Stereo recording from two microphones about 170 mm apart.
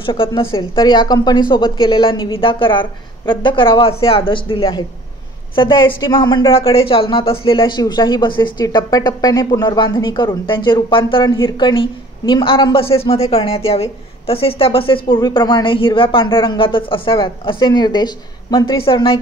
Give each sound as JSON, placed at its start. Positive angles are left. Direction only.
{"t": 0.0, "sound": "a woman's voice", "side_deg": 30}